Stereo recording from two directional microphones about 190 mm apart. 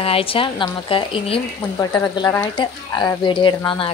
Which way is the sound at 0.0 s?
30° left (ahead or behind).